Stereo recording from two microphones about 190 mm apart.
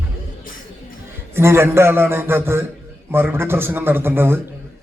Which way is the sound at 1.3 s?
15° right (ahead or behind).